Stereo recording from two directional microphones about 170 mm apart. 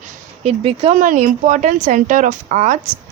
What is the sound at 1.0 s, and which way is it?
A woman's voice, 50° right (ahead or behind).